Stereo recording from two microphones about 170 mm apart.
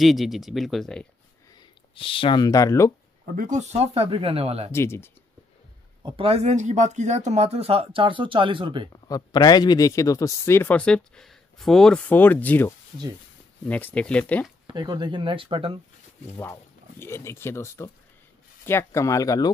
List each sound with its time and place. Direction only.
0.0 s speech: centre (ahead or behind)
1.5 s speech: 30° left (ahead or behind)
3.3 s speech: 50° right (ahead or behind)
4.7 s speech: 15° left (ahead or behind)
6.0 s speech: 35° right (ahead or behind)
8.9 s speech: 25° left (ahead or behind); by 14.5 s 5° left (ahead or behind)
14.7 s speech: 25° right (ahead or behind)
17.0 s speech: 15° left (ahead or behind)